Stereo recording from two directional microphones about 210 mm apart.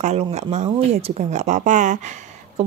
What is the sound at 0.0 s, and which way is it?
Speech, 30° right (ahead or behind).